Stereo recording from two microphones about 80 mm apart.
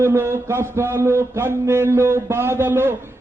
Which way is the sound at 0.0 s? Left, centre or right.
Right.